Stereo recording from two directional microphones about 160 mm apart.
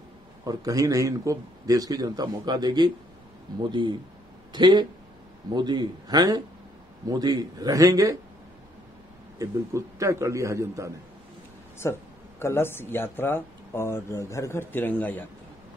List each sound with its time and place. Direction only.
0.5 s a man's voice: 20° right (ahead or behind)
9.4 s a man's voice: 20° right (ahead or behind)
11.8 s speech: 20° left (ahead or behind)